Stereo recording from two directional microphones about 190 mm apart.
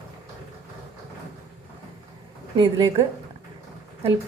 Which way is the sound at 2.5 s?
20° right (ahead or behind).